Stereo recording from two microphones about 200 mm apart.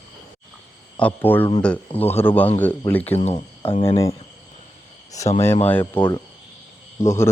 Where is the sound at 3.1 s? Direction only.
30° left (ahead or behind).